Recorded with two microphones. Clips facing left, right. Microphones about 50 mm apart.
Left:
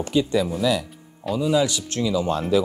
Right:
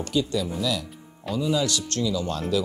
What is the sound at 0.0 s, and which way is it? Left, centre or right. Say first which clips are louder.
Speech: left 4 dB; left.